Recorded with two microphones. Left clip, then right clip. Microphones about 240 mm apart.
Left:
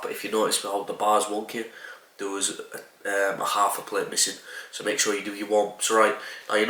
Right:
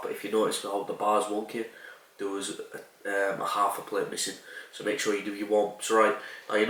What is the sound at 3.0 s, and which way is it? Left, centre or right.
Speech, centre.